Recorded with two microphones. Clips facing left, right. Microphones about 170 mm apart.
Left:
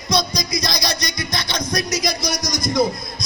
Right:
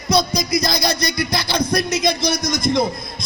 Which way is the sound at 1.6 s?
30° right (ahead or behind).